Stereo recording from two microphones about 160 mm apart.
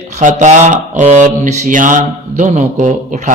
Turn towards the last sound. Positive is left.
turn(degrees=-50)  # may be behind; listen again after turning